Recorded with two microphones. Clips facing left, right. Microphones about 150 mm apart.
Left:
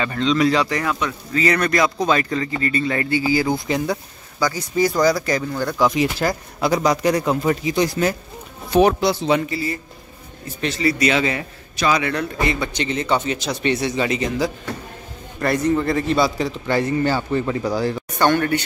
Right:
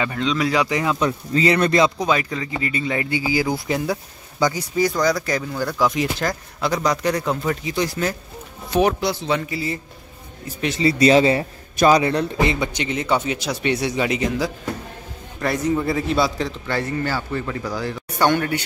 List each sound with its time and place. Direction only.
0.0 s speech: 10° right (ahead or behind)
0.9 s speech: 30° right (ahead or behind)
2.0 s speech: 10° right (ahead or behind)
4.4 s speech: 20° right (ahead or behind)
4.7 s speech: 5° left (ahead or behind)
8.7 s speech: 30° left (ahead or behind)
9.5 s speech: 20° right (ahead or behind)
11.7 s a man's voice: 45° right (ahead or behind)
12.0 s speech: 30° right (ahead or behind)
12.5 s a man's voice: 10° right (ahead or behind)
16.3 s speech: 10° left (ahead or behind); by 17.9 s 30° left (ahead or behind)
18.1 s speech: 10° right (ahead or behind)